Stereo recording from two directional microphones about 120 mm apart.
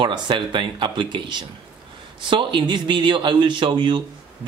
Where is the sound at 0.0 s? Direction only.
40° right (ahead or behind).